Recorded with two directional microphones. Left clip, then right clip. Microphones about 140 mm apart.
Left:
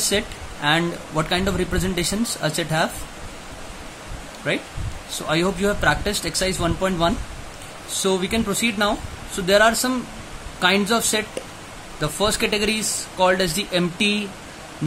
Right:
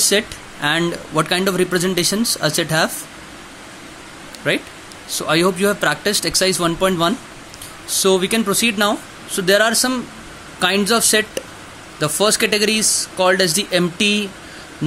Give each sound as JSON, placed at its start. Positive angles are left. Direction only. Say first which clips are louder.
{"t": 0.1, "sound": "speech", "louder": "right 5 dB", "side_deg": -30}
{"t": 4.4, "sound": "speech", "louder": "right 5 dB", "side_deg": -30}